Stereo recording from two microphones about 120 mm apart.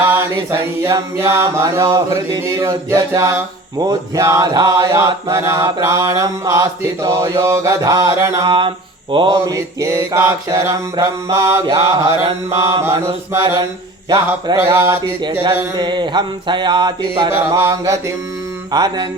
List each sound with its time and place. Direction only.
0.0 s mantra: 20° right (ahead or behind); by 8.7 s 45° right (ahead or behind)
9.1 s a sound: 45° right (ahead or behind)
9.5 s mantra: 25° right (ahead or behind)
15.8 s mantra: 40° right (ahead or behind)
18.7 s mantra: 35° right (ahead or behind)